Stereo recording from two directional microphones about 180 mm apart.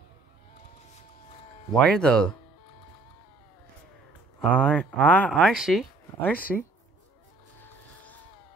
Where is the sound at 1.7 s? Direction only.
5° left (ahead or behind).